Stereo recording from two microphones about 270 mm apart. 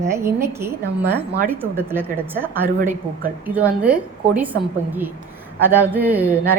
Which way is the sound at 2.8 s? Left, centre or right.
Right.